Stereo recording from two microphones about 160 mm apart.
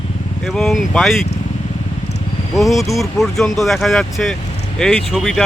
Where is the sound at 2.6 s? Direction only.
Centre (ahead or behind).